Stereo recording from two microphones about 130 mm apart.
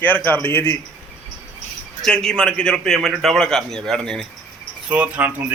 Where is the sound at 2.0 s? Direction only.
5° left (ahead or behind).